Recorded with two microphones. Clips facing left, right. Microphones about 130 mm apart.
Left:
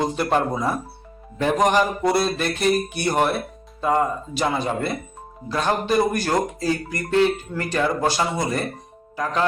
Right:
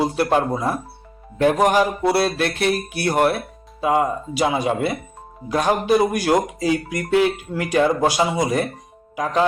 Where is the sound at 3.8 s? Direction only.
10° right (ahead or behind).